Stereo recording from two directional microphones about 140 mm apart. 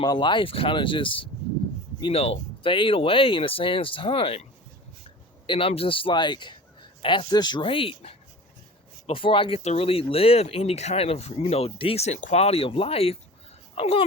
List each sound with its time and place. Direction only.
0.0 s speech: 30° left (ahead or behind)
5.5 s speech: 40° left (ahead or behind)